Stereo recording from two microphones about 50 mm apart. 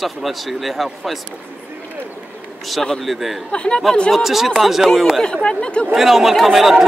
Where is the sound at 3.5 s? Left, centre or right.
Centre.